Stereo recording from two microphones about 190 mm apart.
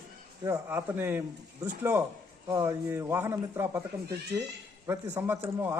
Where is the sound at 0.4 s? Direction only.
10° right (ahead or behind).